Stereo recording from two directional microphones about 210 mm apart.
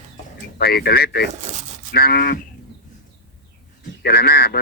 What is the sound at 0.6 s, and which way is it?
Speech, 45° left (ahead or behind).